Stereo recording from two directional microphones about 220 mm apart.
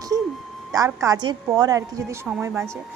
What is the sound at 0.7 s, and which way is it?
A woman's voice, 15° right (ahead or behind).